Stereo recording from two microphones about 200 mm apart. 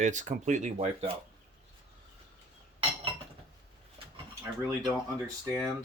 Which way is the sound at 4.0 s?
25° right (ahead or behind).